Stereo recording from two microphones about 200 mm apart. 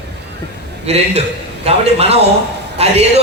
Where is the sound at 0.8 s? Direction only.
30° right (ahead or behind).